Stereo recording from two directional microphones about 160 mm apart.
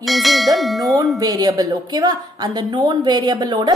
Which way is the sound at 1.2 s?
25° right (ahead or behind).